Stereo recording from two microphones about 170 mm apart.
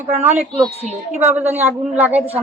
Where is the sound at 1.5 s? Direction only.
10° right (ahead or behind).